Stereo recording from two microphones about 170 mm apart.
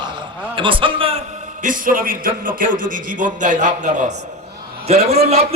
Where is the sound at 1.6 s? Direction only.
50° right (ahead or behind).